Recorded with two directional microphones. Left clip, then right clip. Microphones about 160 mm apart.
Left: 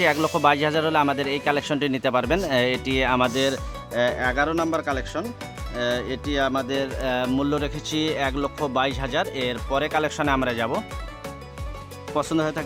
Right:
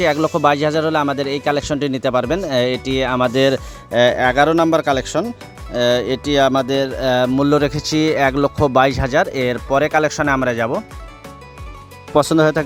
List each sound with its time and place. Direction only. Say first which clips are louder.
0.0 s speech: right 4 dB; 30° right (ahead or behind)
12.1 s speech: right 10 dB; 50° right (ahead or behind)